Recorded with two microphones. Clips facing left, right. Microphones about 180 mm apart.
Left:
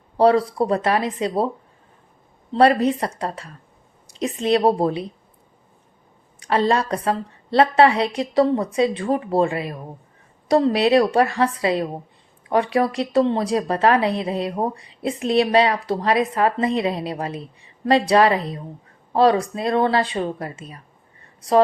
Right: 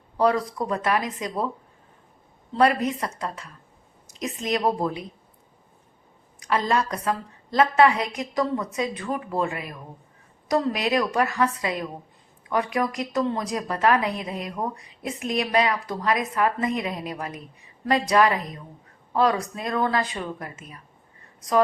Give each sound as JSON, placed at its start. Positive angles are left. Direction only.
{"t": 0.2, "sound": "a woman's voice", "side_deg": 30}
{"t": 2.5, "sound": "a woman's voice", "side_deg": 30}
{"t": 6.4, "sound": "a woman's voice", "side_deg": 30}